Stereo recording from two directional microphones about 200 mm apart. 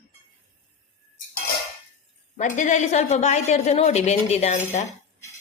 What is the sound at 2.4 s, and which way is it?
A woman's voice, 40° left (ahead or behind).